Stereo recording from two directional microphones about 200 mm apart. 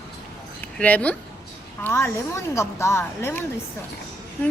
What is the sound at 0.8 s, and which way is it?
Speech, 5° left (ahead or behind).